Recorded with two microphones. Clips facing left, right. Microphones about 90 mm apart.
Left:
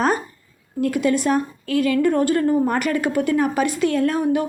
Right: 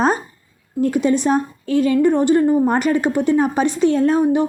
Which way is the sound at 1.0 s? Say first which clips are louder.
Even; 25° right (ahead or behind).